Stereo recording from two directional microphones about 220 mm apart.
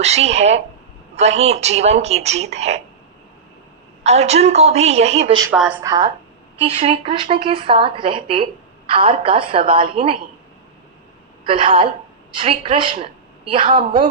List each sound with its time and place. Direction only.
0.0 s a woman's voice: 30° right (ahead or behind)
4.0 s a woman's voice: 30° right (ahead or behind)
5.5 s a woman's voice: 5° right (ahead or behind)
5.8 s a woman's voice: 15° right (ahead or behind)
6.6 s a woman's voice: 25° right (ahead or behind)
11.4 s a woman's voice: 25° right (ahead or behind)